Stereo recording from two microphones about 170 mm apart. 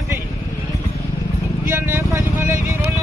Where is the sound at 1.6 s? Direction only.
15° right (ahead or behind).